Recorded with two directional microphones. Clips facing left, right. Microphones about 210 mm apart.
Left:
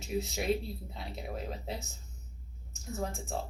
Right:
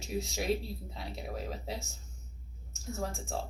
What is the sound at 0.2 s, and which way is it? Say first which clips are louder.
Speech: left 1 dB; centre (ahead or behind).